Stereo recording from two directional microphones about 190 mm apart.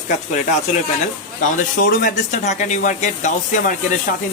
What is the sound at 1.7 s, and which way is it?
Speech, 50° left (ahead or behind).